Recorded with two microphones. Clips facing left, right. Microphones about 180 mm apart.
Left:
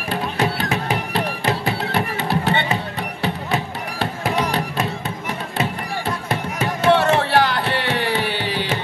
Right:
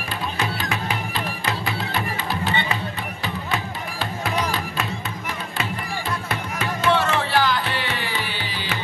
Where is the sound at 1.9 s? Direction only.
65° left (ahead or behind).